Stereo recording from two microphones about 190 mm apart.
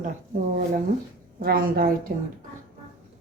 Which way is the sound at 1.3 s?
50° right (ahead or behind).